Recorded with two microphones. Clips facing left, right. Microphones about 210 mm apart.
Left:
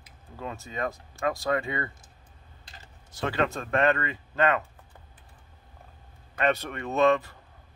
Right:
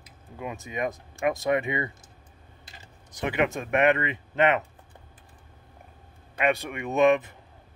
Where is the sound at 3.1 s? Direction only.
15° right (ahead or behind).